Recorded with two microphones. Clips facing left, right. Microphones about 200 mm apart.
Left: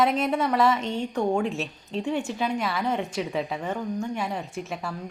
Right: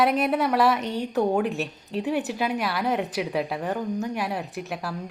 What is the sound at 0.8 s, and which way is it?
Speech, 25° left (ahead or behind).